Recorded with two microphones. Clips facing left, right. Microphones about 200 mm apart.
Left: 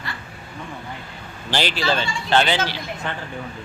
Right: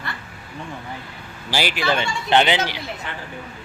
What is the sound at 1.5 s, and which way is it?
Speech, 10° right (ahead or behind).